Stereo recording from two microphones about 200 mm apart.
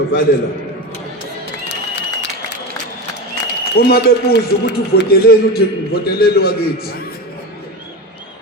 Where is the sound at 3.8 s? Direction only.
50° left (ahead or behind).